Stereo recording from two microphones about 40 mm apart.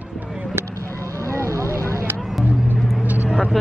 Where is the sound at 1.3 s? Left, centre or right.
Right.